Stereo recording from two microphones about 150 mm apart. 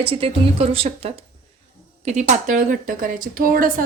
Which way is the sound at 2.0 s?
50° right (ahead or behind).